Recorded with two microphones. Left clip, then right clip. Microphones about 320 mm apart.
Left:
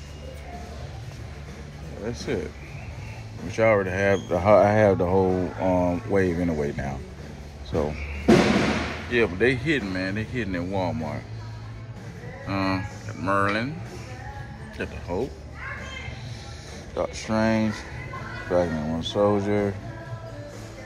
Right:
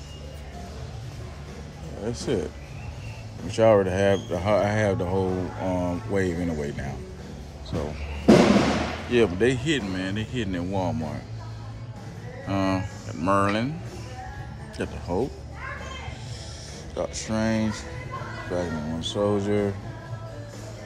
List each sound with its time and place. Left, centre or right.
2.0 s speech: centre
3.5 s speech: centre
9.1 s speech: centre
9.9 s speech: left
10.5 s speech: centre
12.4 s speech: centre
14.8 s speech: centre
16.9 s speech: centre